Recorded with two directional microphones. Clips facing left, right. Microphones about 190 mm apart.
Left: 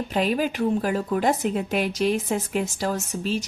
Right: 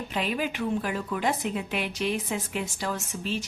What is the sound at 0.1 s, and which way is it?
A woman's voice, 40° left (ahead or behind).